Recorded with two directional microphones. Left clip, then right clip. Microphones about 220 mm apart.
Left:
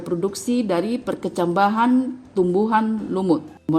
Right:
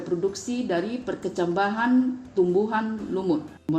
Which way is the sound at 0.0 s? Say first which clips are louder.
Left 2 dB; 50° left (ahead or behind).